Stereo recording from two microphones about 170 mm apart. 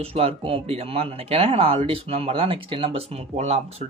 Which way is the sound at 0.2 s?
35° right (ahead or behind).